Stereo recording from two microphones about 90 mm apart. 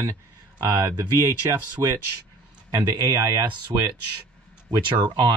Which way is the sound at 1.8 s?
50° right (ahead or behind).